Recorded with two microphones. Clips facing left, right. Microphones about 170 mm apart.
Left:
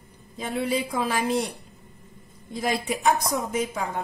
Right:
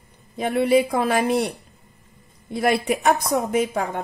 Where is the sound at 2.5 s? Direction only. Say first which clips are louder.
Right 6 dB; 65° right (ahead or behind).